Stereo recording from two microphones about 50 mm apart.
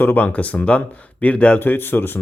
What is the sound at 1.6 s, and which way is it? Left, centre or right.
Speech, left.